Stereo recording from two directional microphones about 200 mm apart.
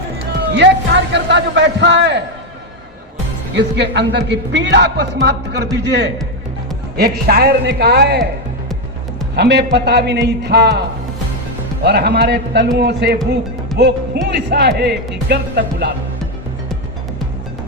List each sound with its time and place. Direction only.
0.5 s speech: 60° right (ahead or behind)
3.5 s a man's voice: 60° right (ahead or behind)
9.3 s speech: 55° right (ahead or behind)